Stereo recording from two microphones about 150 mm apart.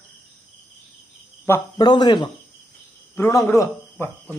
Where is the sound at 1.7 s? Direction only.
30° left (ahead or behind).